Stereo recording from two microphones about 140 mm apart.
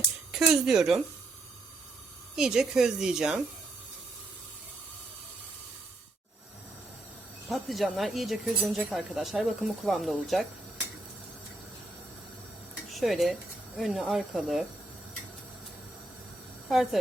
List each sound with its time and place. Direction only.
0.3 s speech: 5° right (ahead or behind)
2.3 s speech: 5° right (ahead or behind)
7.5 s speech: centre (ahead or behind)
12.9 s speech: centre (ahead or behind)
16.6 s speech: centre (ahead or behind)